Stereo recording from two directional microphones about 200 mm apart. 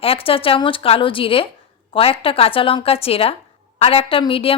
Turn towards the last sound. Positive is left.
turn(degrees=25)  # may be behind; listen again after turning